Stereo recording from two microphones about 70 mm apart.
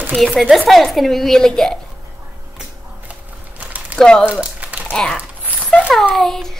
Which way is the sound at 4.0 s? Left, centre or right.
Centre.